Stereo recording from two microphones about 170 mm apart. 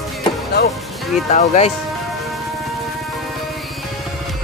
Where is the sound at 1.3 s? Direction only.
40° left (ahead or behind).